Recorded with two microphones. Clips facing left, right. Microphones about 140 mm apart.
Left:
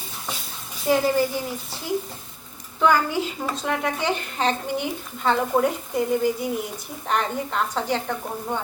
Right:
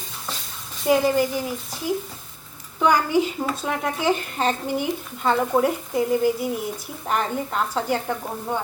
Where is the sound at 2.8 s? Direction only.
15° right (ahead or behind).